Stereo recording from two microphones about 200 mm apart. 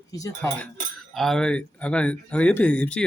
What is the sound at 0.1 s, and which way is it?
Speech, 15° left (ahead or behind).